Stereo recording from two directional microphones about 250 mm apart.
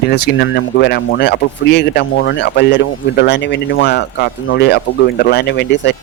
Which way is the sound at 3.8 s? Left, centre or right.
Left.